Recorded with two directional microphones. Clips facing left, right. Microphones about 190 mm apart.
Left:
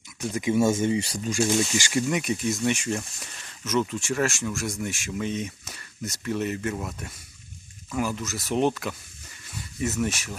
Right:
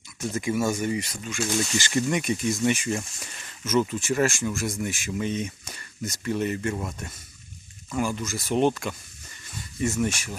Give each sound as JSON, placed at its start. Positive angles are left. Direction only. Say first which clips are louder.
{"t": 0.2, "sound": "speech", "louder": "left 1 dB", "side_deg": 15}
{"t": 0.5, "sound": "speech", "louder": "left 5 dB", "side_deg": 25}
{"t": 1.6, "sound": "speech", "louder": "even", "side_deg": 10}
{"t": 9.8, "sound": "speech", "louder": "right 1 dB", "side_deg": 5}